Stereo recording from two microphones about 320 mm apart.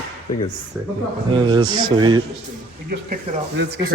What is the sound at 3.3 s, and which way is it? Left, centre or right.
Speech, centre.